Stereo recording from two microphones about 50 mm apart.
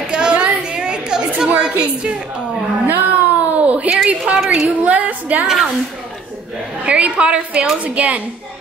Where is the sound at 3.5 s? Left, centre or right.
Right.